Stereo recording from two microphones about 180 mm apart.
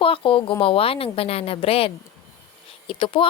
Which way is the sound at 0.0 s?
30° left (ahead or behind).